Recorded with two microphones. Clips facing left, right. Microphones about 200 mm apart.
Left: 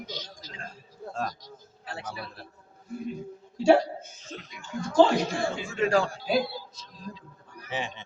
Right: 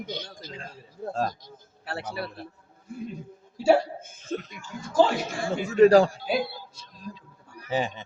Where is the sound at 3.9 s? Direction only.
50° right (ahead or behind).